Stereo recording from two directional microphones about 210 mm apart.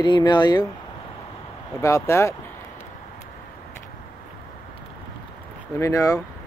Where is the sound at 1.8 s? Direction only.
15° left (ahead or behind).